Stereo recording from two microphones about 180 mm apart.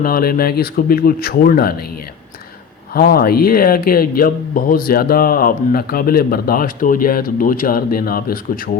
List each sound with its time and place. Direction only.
0.0 s speech: 55° left (ahead or behind)
2.9 s speech: 55° left (ahead or behind)